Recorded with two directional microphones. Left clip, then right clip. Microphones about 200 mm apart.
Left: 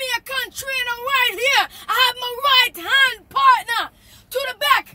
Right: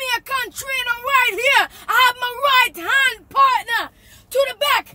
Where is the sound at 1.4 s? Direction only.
5° right (ahead or behind).